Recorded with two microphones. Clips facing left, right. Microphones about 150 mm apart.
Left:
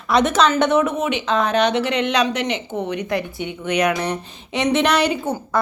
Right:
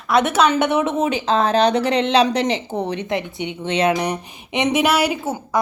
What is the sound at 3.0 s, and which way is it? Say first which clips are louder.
A woman's voice: even; 20° right (ahead or behind).